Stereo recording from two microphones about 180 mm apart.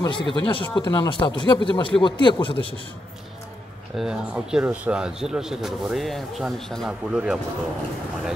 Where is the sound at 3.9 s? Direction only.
5° right (ahead or behind).